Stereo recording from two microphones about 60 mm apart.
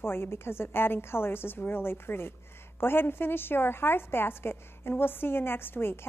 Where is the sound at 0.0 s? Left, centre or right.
Left.